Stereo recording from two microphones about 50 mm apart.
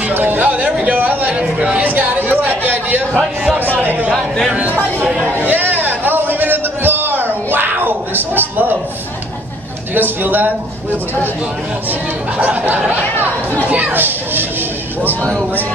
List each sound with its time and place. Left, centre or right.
0.2 s music: right
0.8 s speech: right
1.3 s a man's voice: right
1.8 s chatter: right
3.5 s speech: right
4.5 s a man's voice: right
5.4 s a sound: right
9.9 s speech: right
13.7 s speech: right